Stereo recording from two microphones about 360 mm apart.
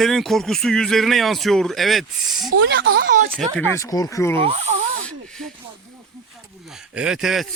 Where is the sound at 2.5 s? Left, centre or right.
Right.